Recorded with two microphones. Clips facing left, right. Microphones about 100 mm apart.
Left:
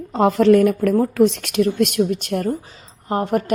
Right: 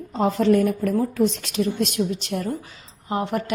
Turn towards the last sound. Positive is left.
turn(degrees=45)  # may be behind; listen again after turning